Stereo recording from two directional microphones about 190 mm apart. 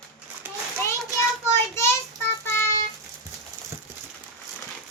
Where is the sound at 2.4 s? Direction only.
10° left (ahead or behind).